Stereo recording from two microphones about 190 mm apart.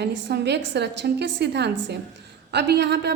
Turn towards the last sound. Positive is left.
turn(degrees=-65)  # may be behind; listen again after turning